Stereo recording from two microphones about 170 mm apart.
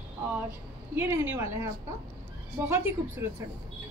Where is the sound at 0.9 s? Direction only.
15° right (ahead or behind).